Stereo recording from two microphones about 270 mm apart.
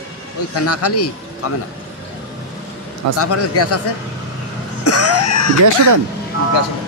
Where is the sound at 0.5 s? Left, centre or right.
Left.